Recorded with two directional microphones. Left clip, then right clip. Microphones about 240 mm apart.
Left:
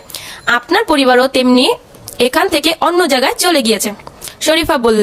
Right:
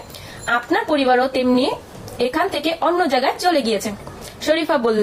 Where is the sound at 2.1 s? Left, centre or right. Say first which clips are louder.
Left 7 dB; left.